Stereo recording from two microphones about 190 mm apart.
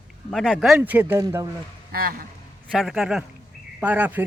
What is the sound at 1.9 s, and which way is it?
Speech, 50° right (ahead or behind).